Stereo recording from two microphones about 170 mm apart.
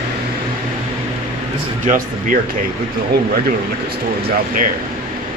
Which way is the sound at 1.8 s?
50° right (ahead or behind).